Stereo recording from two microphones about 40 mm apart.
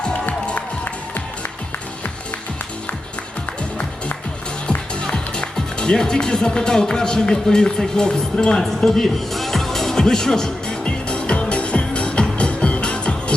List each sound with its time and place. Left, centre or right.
4.9 s speech: left
9.0 s music: centre
10.8 s music: left